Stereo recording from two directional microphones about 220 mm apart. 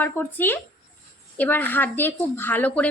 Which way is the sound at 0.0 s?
10° left (ahead or behind).